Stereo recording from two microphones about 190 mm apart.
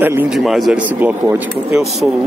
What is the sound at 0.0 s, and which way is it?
Speech, 10° right (ahead or behind).